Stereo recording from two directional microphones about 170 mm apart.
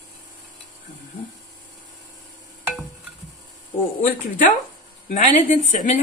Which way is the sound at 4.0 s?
50° left (ahead or behind).